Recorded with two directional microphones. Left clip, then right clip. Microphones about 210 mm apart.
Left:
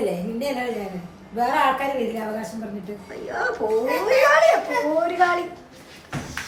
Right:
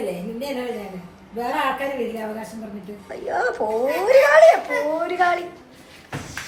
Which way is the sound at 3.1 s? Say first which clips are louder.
Right 3 dB; 5° left (ahead or behind).